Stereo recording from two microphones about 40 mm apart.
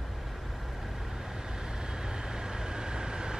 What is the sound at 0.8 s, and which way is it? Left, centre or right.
Vehicle, centre.